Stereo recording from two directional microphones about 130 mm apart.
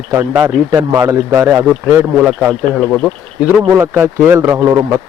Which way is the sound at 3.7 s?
15° right (ahead or behind).